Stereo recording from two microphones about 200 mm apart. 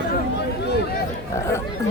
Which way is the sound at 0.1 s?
55° left (ahead or behind).